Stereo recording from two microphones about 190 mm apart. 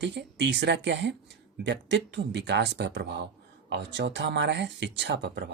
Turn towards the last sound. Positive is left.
turn(degrees=-65)  # may be behind; listen again after turning